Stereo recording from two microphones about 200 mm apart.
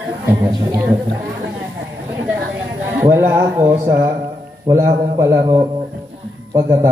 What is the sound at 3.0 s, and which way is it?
A man's voice, 10° right (ahead or behind).